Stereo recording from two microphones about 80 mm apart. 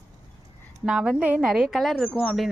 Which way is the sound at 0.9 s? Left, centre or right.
Centre.